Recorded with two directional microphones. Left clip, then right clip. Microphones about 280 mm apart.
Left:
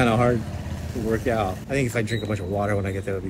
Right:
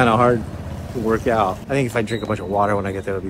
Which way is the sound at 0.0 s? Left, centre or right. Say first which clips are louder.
Right 5 dB; centre.